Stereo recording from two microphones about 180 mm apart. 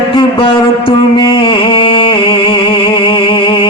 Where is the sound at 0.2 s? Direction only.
30° left (ahead or behind).